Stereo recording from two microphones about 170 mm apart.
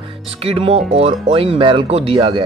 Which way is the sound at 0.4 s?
35° right (ahead or behind).